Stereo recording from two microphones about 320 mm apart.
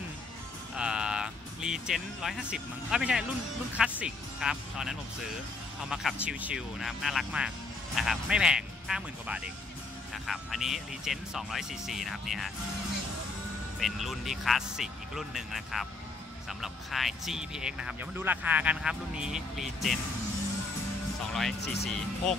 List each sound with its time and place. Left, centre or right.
0.7 s music: centre
3.7 s speech: centre
13.7 s speech: centre
21.3 s speech: centre
21.5 s speech: left